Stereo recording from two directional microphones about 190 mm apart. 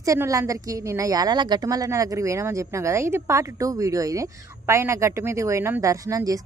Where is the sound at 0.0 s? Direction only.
15° right (ahead or behind).